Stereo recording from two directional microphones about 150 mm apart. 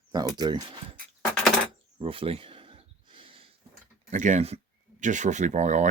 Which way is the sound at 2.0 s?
40° right (ahead or behind).